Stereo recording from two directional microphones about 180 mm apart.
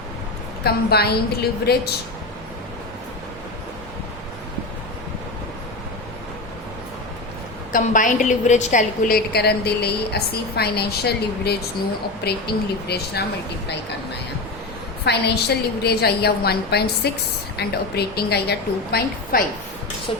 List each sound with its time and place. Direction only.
0.6 s a woman's voice: 60° left (ahead or behind)
7.7 s a woman's voice: 45° left (ahead or behind); by 13.2 s 65° left (ahead or behind)
15.0 s a woman's voice: 65° left (ahead or behind)